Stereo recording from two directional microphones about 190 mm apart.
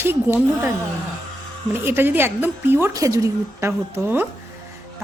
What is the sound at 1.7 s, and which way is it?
A woman's voice, 10° right (ahead or behind).